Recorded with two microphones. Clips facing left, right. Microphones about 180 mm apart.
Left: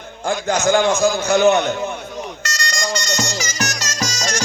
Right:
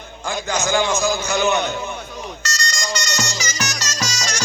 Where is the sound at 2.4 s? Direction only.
55° left (ahead or behind).